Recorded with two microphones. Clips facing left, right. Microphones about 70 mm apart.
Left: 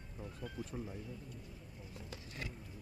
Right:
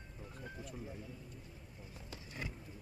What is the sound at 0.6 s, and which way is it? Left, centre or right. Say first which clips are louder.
Speech: left 5 dB; left.